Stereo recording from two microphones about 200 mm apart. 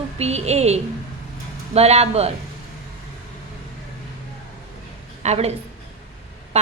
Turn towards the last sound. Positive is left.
turn(degrees=-35)  # may be behind; listen again after turning